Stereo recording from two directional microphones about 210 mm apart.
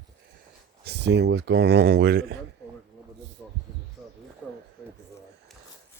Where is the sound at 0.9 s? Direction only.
55° right (ahead or behind).